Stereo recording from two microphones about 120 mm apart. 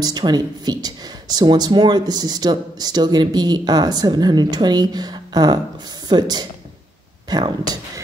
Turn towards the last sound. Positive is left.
turn(degrees=-35)  # may be behind; listen again after turning